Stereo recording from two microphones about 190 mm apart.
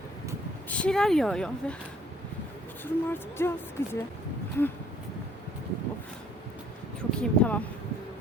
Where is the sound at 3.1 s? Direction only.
10° left (ahead or behind).